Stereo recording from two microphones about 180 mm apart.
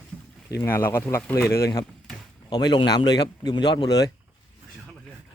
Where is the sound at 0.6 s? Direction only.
10° left (ahead or behind).